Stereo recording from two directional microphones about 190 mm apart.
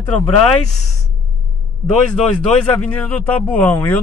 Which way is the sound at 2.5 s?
5° left (ahead or behind).